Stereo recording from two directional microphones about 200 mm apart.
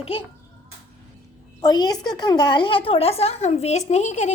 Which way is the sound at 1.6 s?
20° left (ahead or behind).